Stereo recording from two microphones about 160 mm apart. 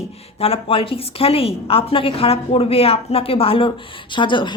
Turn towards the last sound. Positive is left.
turn(degrees=30)  # may be behind; listen again after turning